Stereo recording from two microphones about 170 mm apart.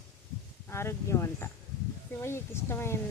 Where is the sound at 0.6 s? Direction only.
15° left (ahead or behind).